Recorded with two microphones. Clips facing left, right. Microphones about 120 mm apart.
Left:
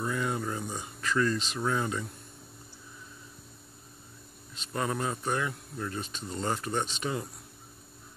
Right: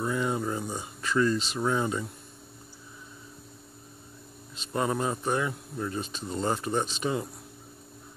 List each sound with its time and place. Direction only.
0.0 s a sound: 15° right (ahead or behind)
1.0 s speech: 15° right (ahead or behind)
1.4 s speech: 5° right (ahead or behind)
1.7 s speech: 15° right (ahead or behind)
4.7 s speech: 20° right (ahead or behind)
6.7 s speech: 5° right (ahead or behind)